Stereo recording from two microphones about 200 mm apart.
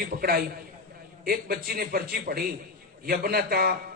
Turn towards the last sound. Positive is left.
turn(degrees=-50)  # may be behind; listen again after turning